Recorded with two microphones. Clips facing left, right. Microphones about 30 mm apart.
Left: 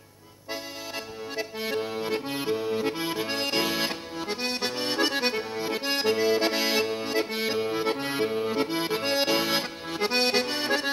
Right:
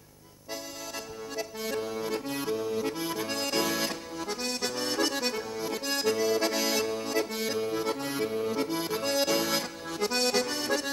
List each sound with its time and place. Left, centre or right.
1.3 s accordion: left